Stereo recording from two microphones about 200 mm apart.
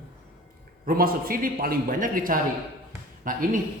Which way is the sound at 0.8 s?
45° right (ahead or behind).